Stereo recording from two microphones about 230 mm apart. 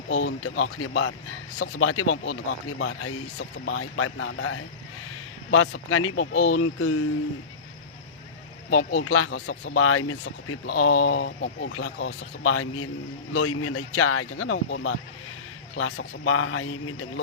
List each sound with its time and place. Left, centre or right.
0.1 s speech: left
8.7 s speech: left